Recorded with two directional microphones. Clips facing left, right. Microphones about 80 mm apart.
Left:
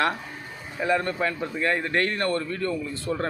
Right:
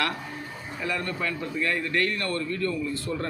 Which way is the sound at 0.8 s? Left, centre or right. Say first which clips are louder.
Left 6 dB; left.